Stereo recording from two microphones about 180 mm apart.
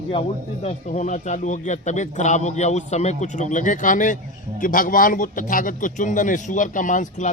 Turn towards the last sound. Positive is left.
turn(degrees=45)  # may be behind; listen again after turning